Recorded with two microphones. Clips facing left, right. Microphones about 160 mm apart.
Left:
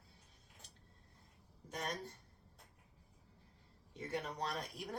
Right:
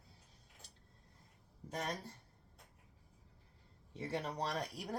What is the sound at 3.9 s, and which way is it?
Speech, 35° right (ahead or behind).